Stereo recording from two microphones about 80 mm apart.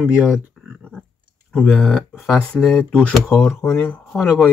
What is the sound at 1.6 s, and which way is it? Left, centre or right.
Speech, centre.